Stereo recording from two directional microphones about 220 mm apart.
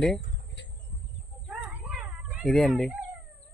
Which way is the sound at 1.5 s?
5° right (ahead or behind).